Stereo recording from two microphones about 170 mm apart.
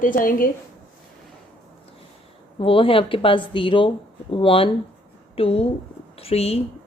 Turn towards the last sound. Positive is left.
turn(degrees=35)  # may be behind; listen again after turning